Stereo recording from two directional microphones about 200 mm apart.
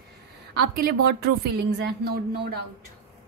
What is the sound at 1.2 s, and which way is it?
A woman's voice, 55° right (ahead or behind).